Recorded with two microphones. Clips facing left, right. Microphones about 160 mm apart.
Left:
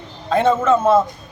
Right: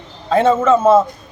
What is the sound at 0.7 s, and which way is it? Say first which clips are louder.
Speech: right 4 dB; 30° right (ahead or behind).